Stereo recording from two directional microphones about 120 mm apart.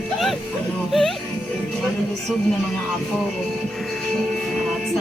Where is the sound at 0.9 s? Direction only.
Centre (ahead or behind).